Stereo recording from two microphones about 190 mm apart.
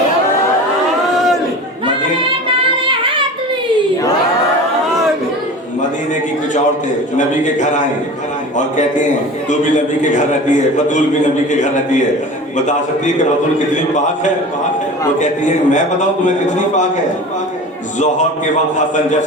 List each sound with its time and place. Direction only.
7.2 s a sound: 40° left (ahead or behind)
9.5 s a man's voice: 40° left (ahead or behind)
15.2 s a man's voice: 40° left (ahead or behind)